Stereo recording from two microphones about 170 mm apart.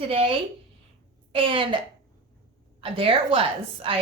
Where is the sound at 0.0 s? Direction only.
35° right (ahead or behind).